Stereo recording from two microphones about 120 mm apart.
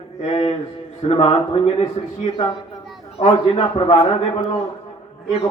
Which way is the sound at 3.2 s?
55° left (ahead or behind).